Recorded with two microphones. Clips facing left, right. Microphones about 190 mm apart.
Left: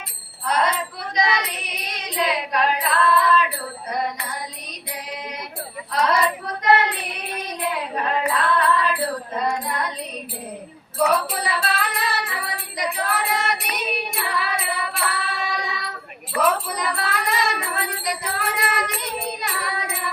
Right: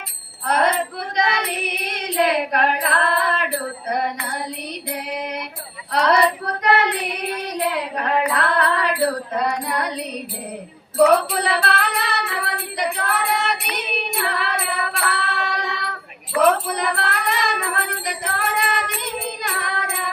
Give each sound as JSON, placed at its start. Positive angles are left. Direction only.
{"t": 0.4, "sound": "female singing", "side_deg": -60}
{"t": 4.9, "sound": "mantra", "side_deg": -60}
{"t": 5.9, "sound": "music", "side_deg": -70}
{"t": 7.9, "sound": "music", "side_deg": -70}
{"t": 10.9, "sound": "female singing", "side_deg": -65}
{"t": 16.4, "sound": "music", "side_deg": -60}